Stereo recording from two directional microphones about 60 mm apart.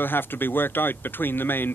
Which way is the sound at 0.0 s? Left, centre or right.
Left.